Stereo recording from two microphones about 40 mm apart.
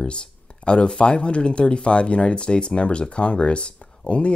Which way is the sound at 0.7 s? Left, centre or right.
Left.